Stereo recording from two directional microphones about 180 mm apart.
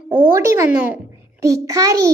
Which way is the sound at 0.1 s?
15° right (ahead or behind).